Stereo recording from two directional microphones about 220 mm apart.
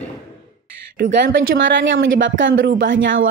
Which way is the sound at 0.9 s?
45° right (ahead or behind).